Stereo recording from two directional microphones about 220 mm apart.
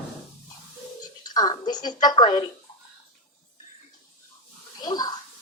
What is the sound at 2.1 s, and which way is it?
Speech, 20° left (ahead or behind).